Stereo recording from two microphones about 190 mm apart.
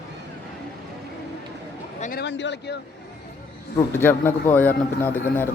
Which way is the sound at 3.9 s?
10° left (ahead or behind).